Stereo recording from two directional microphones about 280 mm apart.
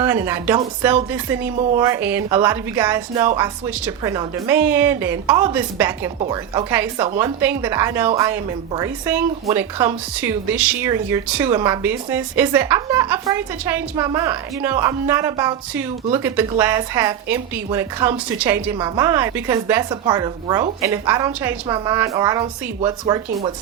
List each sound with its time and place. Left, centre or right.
0.0 s a woman's voice: centre
6.1 s a woman's voice: centre